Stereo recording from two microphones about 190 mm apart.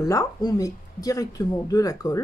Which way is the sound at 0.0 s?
20° left (ahead or behind).